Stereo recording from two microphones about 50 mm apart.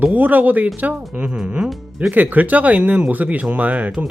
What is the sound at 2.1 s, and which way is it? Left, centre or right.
Speech, right.